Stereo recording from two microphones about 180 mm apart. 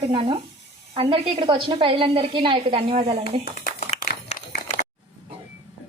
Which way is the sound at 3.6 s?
50° left (ahead or behind).